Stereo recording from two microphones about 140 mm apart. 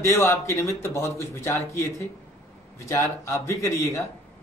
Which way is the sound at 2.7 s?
20° left (ahead or behind).